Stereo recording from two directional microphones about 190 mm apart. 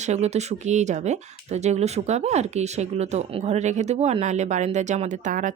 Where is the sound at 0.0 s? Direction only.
35° right (ahead or behind).